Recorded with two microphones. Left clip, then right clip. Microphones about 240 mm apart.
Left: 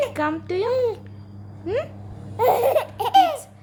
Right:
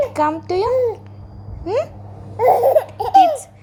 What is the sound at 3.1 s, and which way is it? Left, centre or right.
Speech, left.